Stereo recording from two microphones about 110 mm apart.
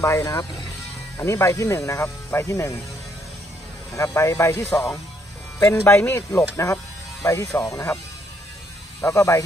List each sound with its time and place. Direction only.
0.0 s speech: 25° left (ahead or behind)
3.9 s speech: 25° left (ahead or behind)
9.0 s speech: 25° left (ahead or behind)